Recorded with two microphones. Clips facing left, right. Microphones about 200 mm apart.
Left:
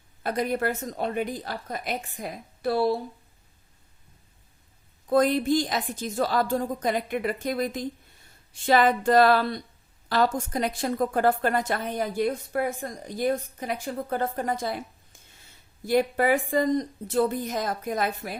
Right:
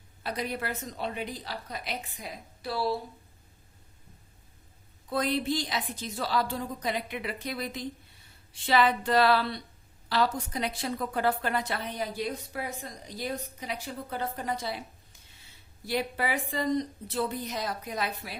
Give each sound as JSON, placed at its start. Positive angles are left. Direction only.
{"t": 0.2, "sound": "a woman's voice", "side_deg": 50}
{"t": 5.0, "sound": "a woman's voice", "side_deg": 45}